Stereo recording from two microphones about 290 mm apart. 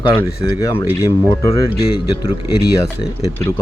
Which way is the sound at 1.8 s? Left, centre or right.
Left.